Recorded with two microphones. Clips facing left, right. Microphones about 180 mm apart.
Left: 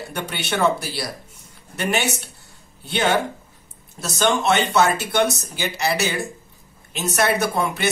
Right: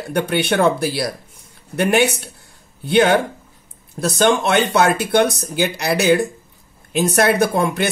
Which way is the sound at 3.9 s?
55° right (ahead or behind).